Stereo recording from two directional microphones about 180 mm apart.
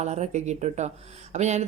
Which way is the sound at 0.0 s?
40° right (ahead or behind).